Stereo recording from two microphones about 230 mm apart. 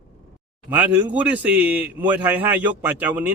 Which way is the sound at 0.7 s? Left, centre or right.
Centre.